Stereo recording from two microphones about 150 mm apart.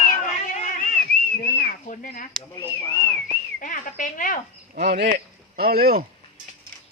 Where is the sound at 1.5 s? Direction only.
65° left (ahead or behind).